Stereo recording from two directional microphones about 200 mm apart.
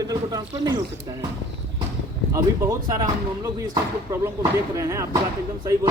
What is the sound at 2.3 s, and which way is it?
Speech, 15° right (ahead or behind).